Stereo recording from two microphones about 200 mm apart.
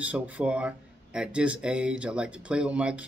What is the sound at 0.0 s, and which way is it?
Speech, 5° right (ahead or behind).